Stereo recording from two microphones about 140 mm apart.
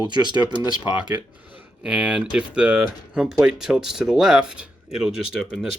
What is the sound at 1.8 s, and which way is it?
Speech, 10° right (ahead or behind).